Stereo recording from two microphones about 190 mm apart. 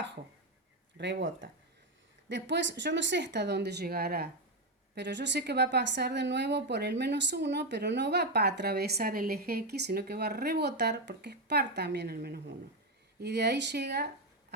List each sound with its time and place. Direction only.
0.9 s speech: 65° right (ahead or behind)
2.3 s a woman's voice: 70° right (ahead or behind); by 4.3 s 55° right (ahead or behind)
4.9 s a woman's voice: 65° right (ahead or behind)